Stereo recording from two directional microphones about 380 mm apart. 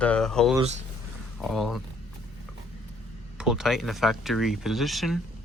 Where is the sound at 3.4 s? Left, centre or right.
Centre.